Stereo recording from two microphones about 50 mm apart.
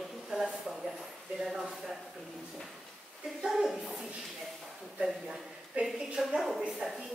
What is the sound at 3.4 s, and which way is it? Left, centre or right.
Speech, centre.